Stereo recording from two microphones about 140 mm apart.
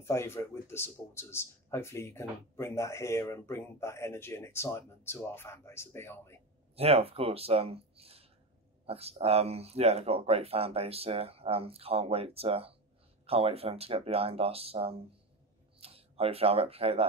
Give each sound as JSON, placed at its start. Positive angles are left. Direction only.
{"t": 0.0, "sound": "speech", "side_deg": 20}
{"t": 6.7, "sound": "speech", "side_deg": -45}